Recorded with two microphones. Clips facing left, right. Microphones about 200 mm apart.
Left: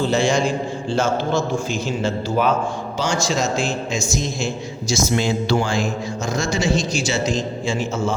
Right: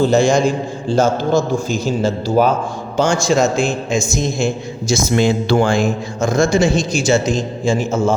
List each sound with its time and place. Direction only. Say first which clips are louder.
0.0 s a man's voice: right 5 dB; 45° right (ahead or behind)
3.0 s a man's voice: right 7 dB; 50° right (ahead or behind)